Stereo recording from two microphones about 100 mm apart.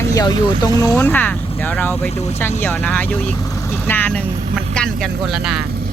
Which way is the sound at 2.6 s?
15° left (ahead or behind).